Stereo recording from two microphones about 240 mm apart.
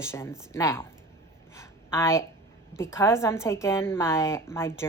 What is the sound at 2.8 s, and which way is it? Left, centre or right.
Speech, centre.